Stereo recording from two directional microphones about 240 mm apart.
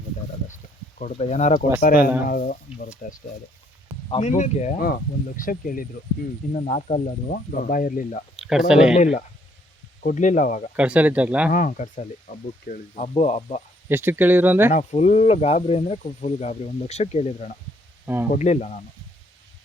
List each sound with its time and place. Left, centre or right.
0.4 s speech: left
8.4 s speech: centre
10.0 s speech: left
10.8 s a man's voice: centre
11.5 s speech: left
13.8 s speech: centre
14.7 s speech: left
18.0 s a man's voice: centre
18.3 s speech: left